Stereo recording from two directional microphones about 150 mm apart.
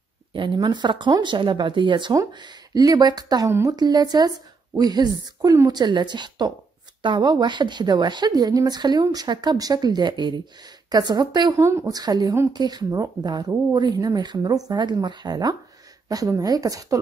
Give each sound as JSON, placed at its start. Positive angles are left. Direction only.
{"t": 0.3, "sound": "a woman's voice", "side_deg": -30}